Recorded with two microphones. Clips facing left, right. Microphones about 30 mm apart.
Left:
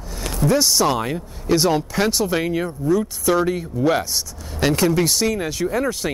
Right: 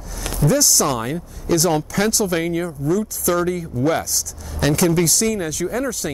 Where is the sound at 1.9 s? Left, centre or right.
Left.